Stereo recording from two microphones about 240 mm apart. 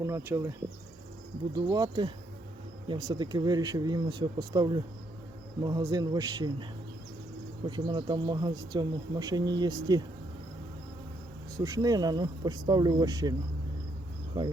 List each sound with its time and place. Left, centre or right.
0.0 s speech: centre
1.5 s speech: centre
7.7 s speech: centre
11.5 s speech: centre
14.3 s speech: centre